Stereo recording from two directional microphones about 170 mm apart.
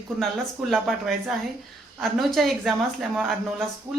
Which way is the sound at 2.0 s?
Centre (ahead or behind).